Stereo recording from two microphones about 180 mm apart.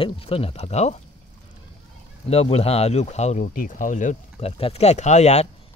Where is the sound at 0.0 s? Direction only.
30° left (ahead or behind).